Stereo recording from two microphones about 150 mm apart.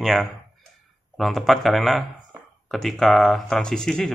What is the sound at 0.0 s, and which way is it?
Speech, centre (ahead or behind).